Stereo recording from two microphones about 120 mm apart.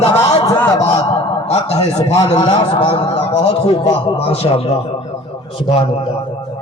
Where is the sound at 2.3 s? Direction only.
40° left (ahead or behind).